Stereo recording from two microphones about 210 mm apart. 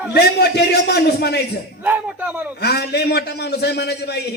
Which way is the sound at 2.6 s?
50° left (ahead or behind).